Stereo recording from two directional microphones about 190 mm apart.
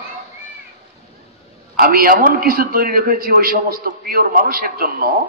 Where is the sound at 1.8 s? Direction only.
50° right (ahead or behind).